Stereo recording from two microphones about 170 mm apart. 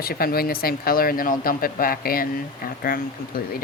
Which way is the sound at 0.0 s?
60° left (ahead or behind).